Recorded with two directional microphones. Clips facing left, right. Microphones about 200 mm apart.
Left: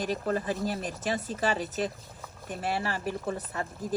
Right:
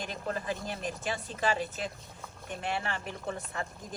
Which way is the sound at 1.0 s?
40° left (ahead or behind).